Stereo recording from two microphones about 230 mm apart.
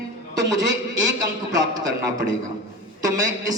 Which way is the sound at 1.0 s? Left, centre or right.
Centre.